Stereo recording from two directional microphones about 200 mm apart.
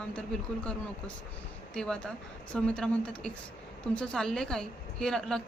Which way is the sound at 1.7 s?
5° left (ahead or behind).